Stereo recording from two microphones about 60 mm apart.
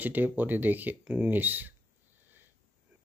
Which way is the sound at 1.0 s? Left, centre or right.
Centre.